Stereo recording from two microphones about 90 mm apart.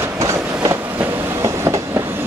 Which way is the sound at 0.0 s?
30° right (ahead or behind).